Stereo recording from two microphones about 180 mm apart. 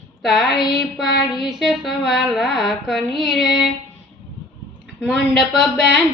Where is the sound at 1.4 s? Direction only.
Centre (ahead or behind).